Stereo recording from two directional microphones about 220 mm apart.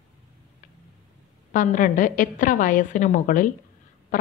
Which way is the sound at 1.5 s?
35° left (ahead or behind).